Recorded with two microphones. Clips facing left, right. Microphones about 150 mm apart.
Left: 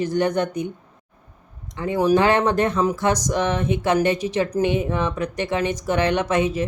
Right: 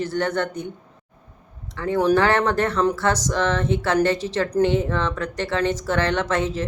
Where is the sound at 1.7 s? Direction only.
15° left (ahead or behind).